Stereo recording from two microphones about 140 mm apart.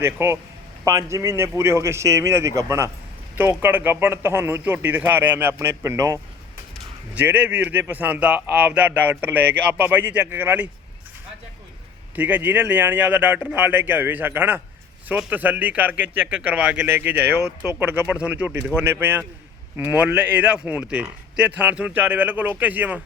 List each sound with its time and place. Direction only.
0.0 s a man's voice: 20° right (ahead or behind)
12.1 s a man's voice: 10° right (ahead or behind)